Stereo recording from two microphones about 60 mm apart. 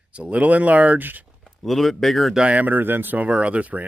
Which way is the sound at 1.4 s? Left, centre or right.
Centre.